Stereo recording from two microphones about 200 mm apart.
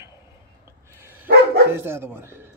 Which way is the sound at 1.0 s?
10° right (ahead or behind).